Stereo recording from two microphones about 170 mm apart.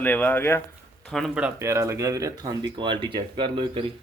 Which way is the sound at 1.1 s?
5° right (ahead or behind).